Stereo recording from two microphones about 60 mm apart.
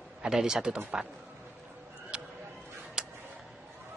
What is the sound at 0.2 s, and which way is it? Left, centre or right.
Speech, centre.